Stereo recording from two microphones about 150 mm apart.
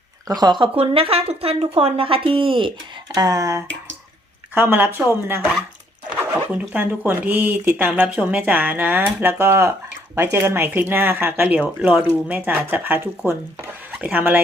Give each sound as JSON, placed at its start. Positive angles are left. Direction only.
{"t": 0.3, "sound": "speech", "side_deg": -25}
{"t": 0.8, "sound": "speech", "side_deg": -40}
{"t": 3.2, "sound": "speech", "side_deg": -25}
{"t": 6.1, "sound": "speech", "side_deg": -10}